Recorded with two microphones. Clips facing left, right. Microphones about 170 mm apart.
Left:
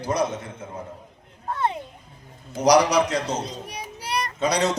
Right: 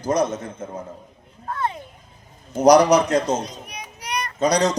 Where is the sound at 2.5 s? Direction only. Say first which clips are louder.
Right 4 dB; 50° right (ahead or behind).